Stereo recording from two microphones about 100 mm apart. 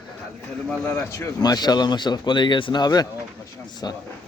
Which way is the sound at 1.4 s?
45° left (ahead or behind).